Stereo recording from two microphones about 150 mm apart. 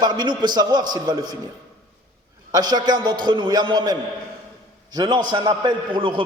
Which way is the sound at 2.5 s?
25° right (ahead or behind).